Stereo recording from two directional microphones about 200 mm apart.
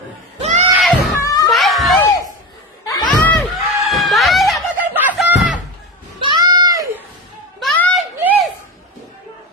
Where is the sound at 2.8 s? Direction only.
15° left (ahead or behind); by 5.2 s 5° right (ahead or behind).